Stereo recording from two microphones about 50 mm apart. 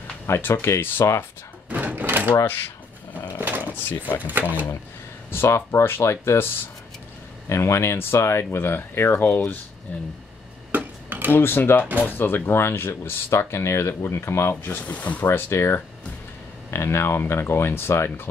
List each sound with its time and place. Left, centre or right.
0.3 s speech: left
1.7 s drawer open or close: right
2.4 s speech: left
3.3 s drawer open or close: right
4.2 s speech: right
5.3 s speech: left
7.4 s speech: left
9.9 s speech: left
10.7 s a sound: right
11.3 s speech: left
14.8 s speech: left
15.2 s speech: left